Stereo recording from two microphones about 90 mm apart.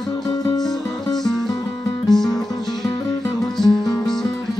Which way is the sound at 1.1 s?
5° left (ahead or behind).